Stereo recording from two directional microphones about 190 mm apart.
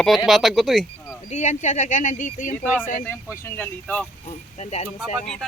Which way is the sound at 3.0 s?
10° left (ahead or behind).